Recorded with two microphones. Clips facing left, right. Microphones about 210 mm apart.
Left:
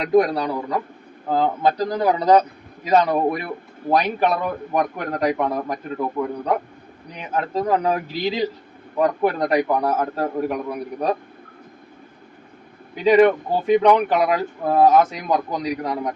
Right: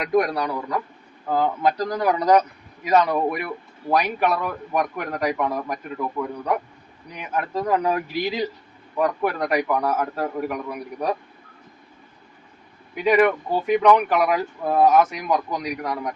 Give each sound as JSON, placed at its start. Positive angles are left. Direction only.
{"t": 0.0, "sound": "a man's voice", "side_deg": 25}
{"t": 7.2, "sound": "a man's voice", "side_deg": 25}
{"t": 13.0, "sound": "a man's voice", "side_deg": 30}